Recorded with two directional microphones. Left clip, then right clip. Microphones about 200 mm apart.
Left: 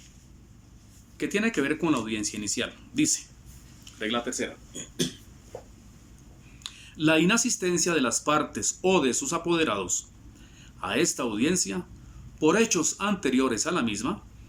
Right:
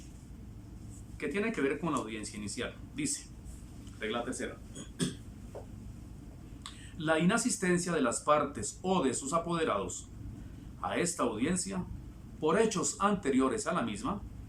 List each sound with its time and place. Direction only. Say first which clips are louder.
1.2 s speech: left 6 dB; 20° left (ahead or behind)
6.6 s speech: left 12 dB; 15° left (ahead or behind)